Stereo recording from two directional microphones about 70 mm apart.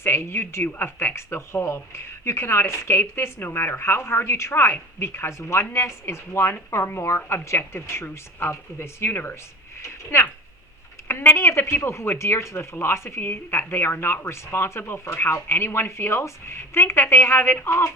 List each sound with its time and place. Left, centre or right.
0.0 s speech: left